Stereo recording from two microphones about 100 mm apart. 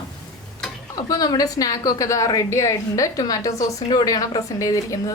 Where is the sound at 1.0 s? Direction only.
40° left (ahead or behind).